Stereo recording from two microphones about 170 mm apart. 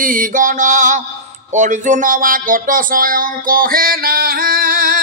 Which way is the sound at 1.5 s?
45° right (ahead or behind).